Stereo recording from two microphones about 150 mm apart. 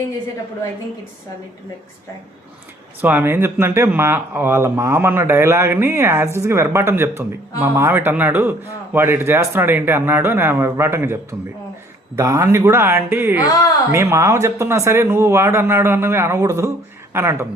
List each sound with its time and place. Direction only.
3.0 s speech: 10° right (ahead or behind)